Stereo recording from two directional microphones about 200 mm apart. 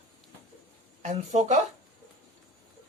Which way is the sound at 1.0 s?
35° right (ahead or behind).